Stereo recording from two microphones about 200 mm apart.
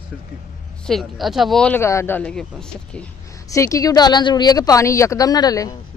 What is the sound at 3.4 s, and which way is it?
Speech, 15° left (ahead or behind).